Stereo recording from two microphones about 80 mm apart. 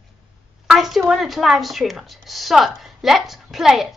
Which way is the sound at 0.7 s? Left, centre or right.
Centre.